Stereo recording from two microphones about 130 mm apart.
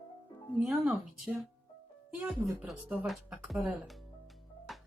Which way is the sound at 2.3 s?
5° right (ahead or behind).